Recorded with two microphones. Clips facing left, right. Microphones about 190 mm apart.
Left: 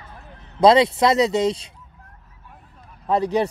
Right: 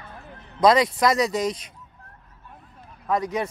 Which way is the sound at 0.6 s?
25° left (ahead or behind).